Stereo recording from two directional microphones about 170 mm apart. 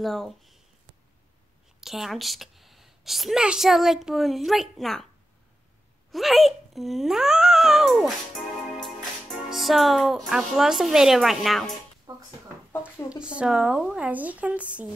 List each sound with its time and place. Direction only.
0.0 s speech: centre (ahead or behind)
1.8 s speech: centre (ahead or behind)
6.1 s speech: centre (ahead or behind)
12.1 s a sound: 20° right (ahead or behind)
13.2 s a woman's voice: 5° right (ahead or behind)